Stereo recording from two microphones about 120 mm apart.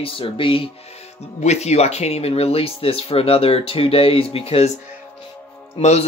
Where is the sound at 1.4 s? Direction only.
65° left (ahead or behind).